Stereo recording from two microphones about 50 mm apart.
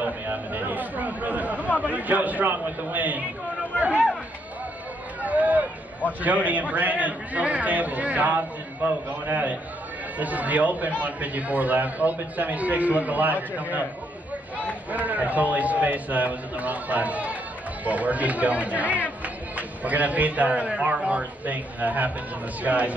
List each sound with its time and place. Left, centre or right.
0.0 s speech: right
5.2 s speech: right
14.9 s speech: right